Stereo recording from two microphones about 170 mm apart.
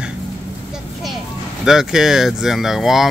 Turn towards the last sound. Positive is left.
turn(degrees=0)  # may be behind; listen again after turning